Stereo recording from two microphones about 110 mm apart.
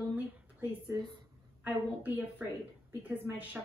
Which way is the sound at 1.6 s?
15° right (ahead or behind).